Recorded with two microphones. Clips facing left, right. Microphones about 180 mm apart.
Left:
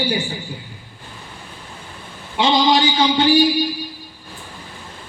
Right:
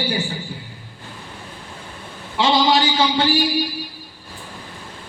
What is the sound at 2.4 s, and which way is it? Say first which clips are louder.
Speech: left 1 dB; 15° left (ahead or behind).